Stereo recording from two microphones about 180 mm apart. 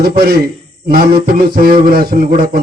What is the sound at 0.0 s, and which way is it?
A man's voice, 60° right (ahead or behind).